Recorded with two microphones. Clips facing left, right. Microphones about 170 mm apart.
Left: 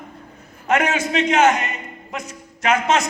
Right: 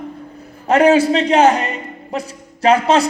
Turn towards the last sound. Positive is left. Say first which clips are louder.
# right 6 dB
turn(degrees=-30)  # may be behind; listen again after turning